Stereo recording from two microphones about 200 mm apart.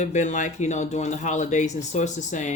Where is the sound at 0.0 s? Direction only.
35° left (ahead or behind).